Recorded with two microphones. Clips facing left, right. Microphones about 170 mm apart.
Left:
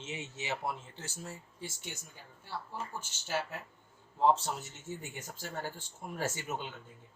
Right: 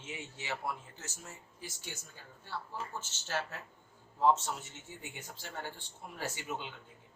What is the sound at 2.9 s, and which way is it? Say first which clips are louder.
Speech: left 2 dB; 10° left (ahead or behind).